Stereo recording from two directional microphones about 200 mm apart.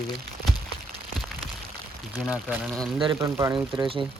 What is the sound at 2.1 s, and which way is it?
Speech, 5° left (ahead or behind).